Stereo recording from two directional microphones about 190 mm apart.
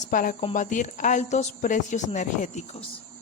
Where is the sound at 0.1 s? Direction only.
45° left (ahead or behind).